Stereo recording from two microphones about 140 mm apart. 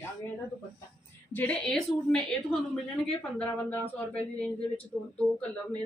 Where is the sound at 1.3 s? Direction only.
10° left (ahead or behind).